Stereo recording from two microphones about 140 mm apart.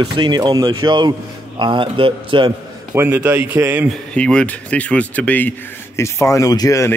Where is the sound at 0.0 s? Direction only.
35° right (ahead or behind).